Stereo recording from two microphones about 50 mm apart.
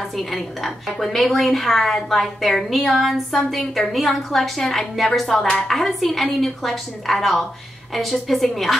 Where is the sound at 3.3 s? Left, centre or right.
Centre.